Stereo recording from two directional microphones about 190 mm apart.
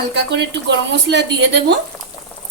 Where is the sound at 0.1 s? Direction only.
65° right (ahead or behind).